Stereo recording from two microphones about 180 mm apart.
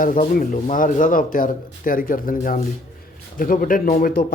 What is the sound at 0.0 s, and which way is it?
Speech, 50° left (ahead or behind).